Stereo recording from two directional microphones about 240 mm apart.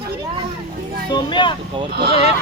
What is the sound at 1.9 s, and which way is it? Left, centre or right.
Speech, right.